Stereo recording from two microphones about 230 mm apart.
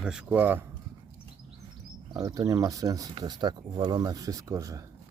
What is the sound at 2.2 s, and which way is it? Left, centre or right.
Speech, centre.